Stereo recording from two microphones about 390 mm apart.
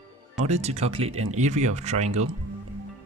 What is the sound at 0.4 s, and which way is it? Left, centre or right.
Speech, centre.